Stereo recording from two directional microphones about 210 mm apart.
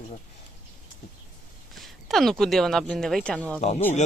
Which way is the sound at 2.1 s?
Centre (ahead or behind).